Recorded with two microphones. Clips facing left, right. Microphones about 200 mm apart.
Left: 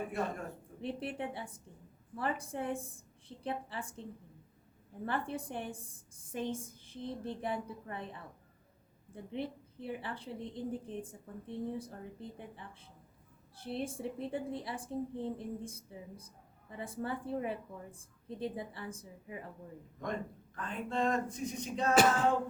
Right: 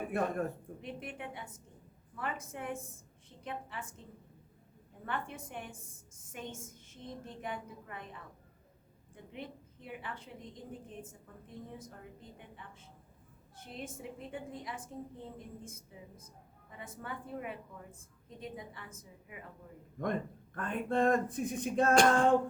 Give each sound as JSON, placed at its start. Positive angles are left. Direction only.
{"t": 0.1, "sound": "speech", "side_deg": -55}
{"t": 0.8, "sound": "a woman's voice", "side_deg": 30}
{"t": 5.0, "sound": "a woman's voice", "side_deg": 35}
{"t": 9.1, "sound": "a woman's voice", "side_deg": 30}
{"t": 20.6, "sound": "speech", "side_deg": -55}
{"t": 21.9, "sound": "music", "side_deg": 5}